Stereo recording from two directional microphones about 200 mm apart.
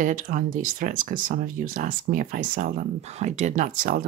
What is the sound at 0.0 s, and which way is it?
Speech, 40° right (ahead or behind).